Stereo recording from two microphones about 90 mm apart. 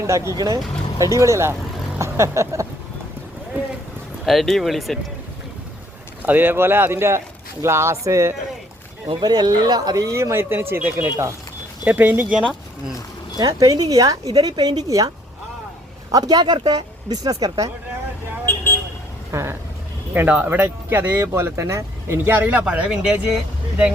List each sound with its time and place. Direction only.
0.3 s speech: 40° right (ahead or behind)
2.0 s vehicle: 35° right (ahead or behind)
4.3 s speech: centre (ahead or behind)
6.2 s speech: 20° right (ahead or behind)
9.2 s speech: 50° right (ahead or behind); by 12.5 s 20° right (ahead or behind)
13.4 s a woman's voice: 45° right (ahead or behind)
16.1 s a woman's voice: 45° right (ahead or behind)
18.4 s vehicle: 25° left (ahead or behind)
19.3 s a sound: 30° right (ahead or behind)
20.1 s speech: 15° right (ahead or behind)